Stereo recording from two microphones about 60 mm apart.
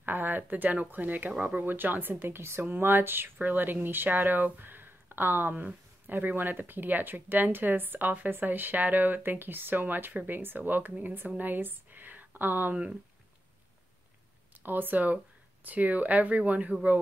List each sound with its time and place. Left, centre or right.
0.0 s speech: right
14.6 s speech: right